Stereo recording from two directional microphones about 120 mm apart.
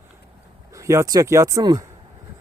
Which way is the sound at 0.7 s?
25° right (ahead or behind).